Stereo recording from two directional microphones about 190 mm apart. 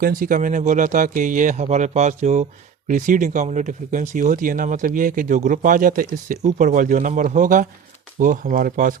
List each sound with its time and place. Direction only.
0.0 s speech: 50° right (ahead or behind)